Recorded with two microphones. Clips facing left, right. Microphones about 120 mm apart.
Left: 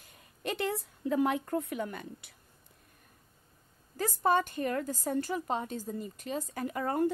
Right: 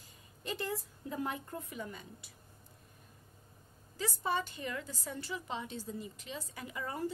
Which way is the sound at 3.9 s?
50° left (ahead or behind).